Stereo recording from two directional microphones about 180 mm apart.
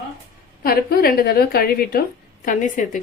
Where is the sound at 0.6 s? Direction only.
55° left (ahead or behind).